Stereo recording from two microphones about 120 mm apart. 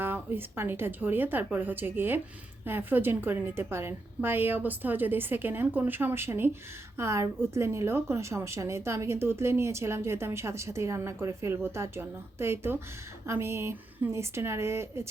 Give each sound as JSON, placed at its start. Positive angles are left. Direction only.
{"t": 0.0, "sound": "a woman's voice", "side_deg": -15}